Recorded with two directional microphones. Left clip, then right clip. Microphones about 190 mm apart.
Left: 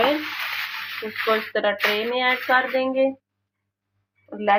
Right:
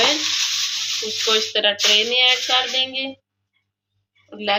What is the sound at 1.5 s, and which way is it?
Speech, 35° left (ahead or behind).